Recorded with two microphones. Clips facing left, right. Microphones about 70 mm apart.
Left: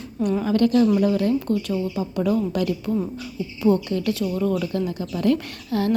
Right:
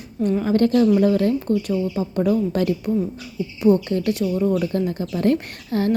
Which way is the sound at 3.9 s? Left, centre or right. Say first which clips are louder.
Right 2 dB; right.